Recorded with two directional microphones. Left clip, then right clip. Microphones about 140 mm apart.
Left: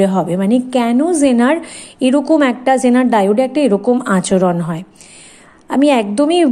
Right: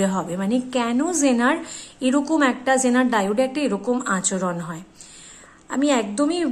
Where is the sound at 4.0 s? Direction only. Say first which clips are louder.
Left 10 dB; 45° left (ahead or behind).